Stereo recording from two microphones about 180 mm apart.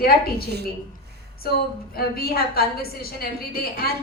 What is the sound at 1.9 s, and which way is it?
Speech, 55° left (ahead or behind).